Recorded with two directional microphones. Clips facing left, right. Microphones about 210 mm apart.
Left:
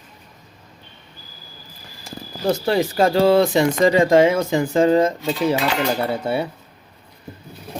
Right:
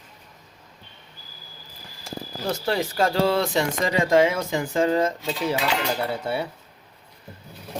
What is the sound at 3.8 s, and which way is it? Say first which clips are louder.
Speech: left 5 dB; 30° left (ahead or behind).